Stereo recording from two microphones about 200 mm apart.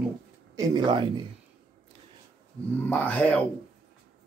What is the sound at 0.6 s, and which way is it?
Speech, 25° right (ahead or behind).